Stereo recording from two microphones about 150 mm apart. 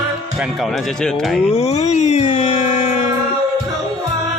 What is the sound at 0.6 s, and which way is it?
Speech, centre (ahead or behind).